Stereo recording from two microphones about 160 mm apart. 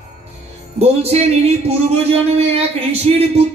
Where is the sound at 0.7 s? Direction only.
40° right (ahead or behind).